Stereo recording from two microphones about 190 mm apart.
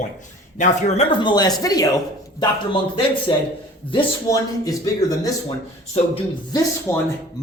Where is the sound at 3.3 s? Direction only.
25° left (ahead or behind).